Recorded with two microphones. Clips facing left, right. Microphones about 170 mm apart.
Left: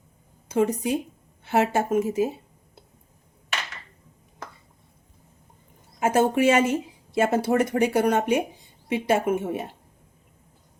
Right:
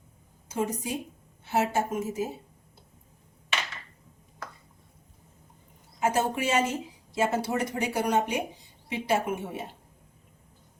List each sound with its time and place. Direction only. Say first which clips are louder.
0.5 s speech: left 8 dB; 65° left (ahead or behind)
6.0 s speech: left 6 dB; 55° left (ahead or behind)